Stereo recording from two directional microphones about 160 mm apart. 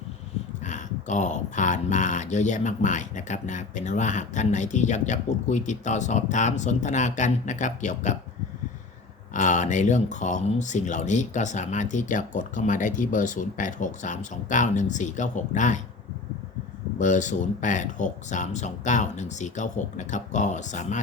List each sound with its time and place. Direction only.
0.6 s speech: 50° left (ahead or behind)
9.3 s speech: 50° left (ahead or behind)
17.0 s speech: 50° left (ahead or behind)